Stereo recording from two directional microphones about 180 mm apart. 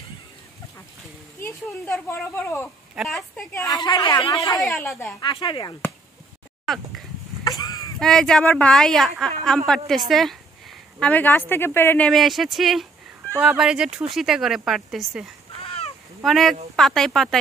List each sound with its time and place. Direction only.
1.4 s a woman's voice: 15° left (ahead or behind)
3.0 s speech: 5° right (ahead or behind)
3.5 s speech: 20° left (ahead or behind)
4.6 s speech: 5° left (ahead or behind)
5.2 s speech: 25° left (ahead or behind)
6.7 s speech: centre (ahead or behind)
7.4 s honk: 20° left (ahead or behind)
8.0 s a woman's voice: 5° left (ahead or behind)
12.1 s speech: centre (ahead or behind)
15.6 s a sound: 35° left (ahead or behind)
16.2 s speech: centre (ahead or behind)